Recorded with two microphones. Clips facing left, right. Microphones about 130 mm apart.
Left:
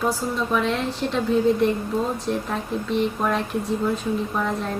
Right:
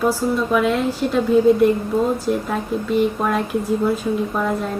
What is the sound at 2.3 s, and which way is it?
A woman's voice, 5° right (ahead or behind).